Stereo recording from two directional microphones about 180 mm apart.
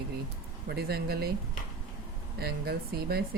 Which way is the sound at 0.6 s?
60° right (ahead or behind).